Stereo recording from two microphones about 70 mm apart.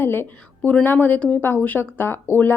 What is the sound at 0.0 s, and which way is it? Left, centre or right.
A woman's voice, left.